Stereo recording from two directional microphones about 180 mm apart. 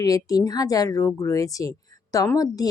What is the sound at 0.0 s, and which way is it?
A woman's voice, 20° left (ahead or behind).